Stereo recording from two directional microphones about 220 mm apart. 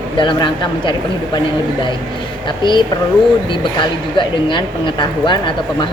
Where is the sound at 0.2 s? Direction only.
20° left (ahead or behind).